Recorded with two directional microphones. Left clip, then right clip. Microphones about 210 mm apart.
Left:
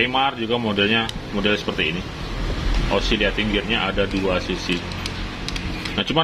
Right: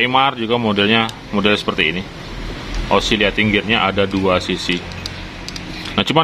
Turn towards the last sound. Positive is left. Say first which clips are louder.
# right 6 dB
turn(degrees=-25)  # may be behind; listen again after turning